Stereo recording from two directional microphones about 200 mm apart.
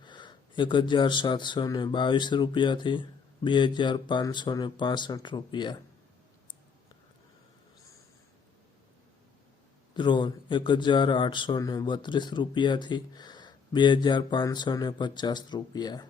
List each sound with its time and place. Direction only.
0.0 s speech: 25° left (ahead or behind)
9.9 s speech: 25° left (ahead or behind)